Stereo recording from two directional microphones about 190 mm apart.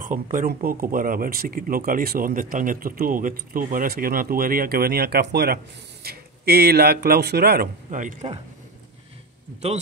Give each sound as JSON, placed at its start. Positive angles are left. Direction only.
{"t": 0.0, "sound": "speech", "side_deg": -45}